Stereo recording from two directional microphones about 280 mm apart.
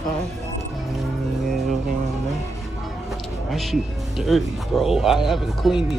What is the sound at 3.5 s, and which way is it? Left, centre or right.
Speech, centre.